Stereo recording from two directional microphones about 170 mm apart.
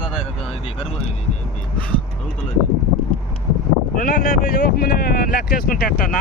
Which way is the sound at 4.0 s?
65° left (ahead or behind).